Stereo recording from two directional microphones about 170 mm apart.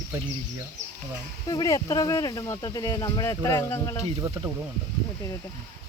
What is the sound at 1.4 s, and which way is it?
Speech, 20° left (ahead or behind).